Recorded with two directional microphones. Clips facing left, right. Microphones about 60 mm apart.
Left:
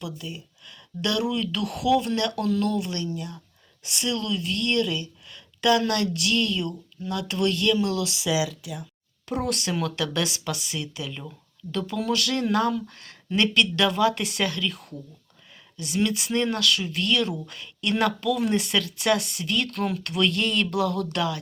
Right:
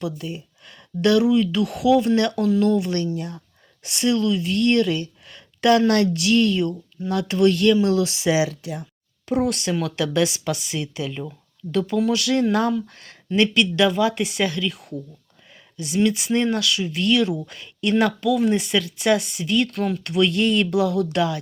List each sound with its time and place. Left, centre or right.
0.2 s speech: right
1.0 s speech: right
3.2 s speech: right
8.3 s speech: right
9.2 s speech: centre
16.1 s speech: centre
18.0 s speech: centre